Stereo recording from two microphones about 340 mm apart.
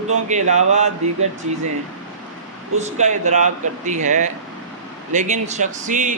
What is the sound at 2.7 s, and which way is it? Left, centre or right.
Speech, centre.